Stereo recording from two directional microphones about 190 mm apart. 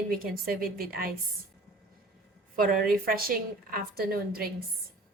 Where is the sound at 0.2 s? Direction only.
50° right (ahead or behind).